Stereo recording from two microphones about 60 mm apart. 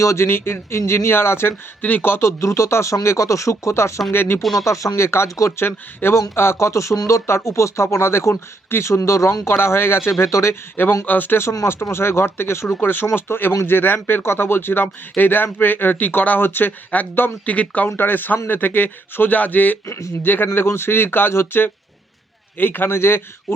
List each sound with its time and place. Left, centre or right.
0.0 s speech: left
0.3 s speech: left
1.8 s speech: left
2.4 s speech: left
4.1 s speech: left
4.6 s speech: left
7.3 s speech: left
10.2 s speech: left
11.0 s speech: left
12.8 s speech: left